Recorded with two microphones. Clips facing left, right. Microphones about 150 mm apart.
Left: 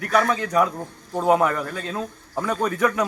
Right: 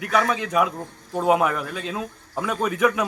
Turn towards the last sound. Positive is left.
turn(degrees=-10)  # may be behind; listen again after turning